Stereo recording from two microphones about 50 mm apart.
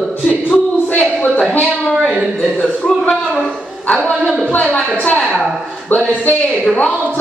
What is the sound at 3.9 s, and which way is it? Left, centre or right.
A man's voice, left.